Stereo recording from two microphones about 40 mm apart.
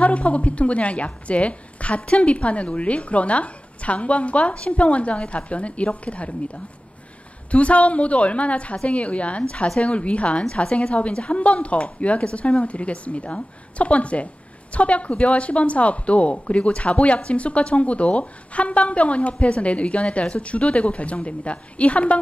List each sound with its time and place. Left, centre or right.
0.0 s speech: left
7.5 s speech: left